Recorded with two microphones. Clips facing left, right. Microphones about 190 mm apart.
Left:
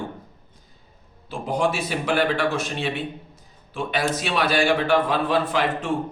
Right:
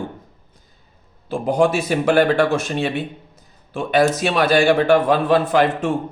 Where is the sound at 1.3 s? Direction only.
45° right (ahead or behind).